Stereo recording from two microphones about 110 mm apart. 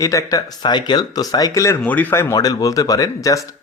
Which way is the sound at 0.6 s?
40° left (ahead or behind).